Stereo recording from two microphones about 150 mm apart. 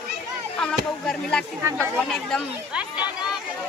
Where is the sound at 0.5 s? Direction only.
5° left (ahead or behind).